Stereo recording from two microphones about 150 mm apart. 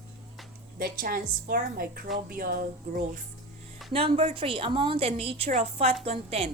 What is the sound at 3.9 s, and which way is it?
A woman's voice, 40° right (ahead or behind).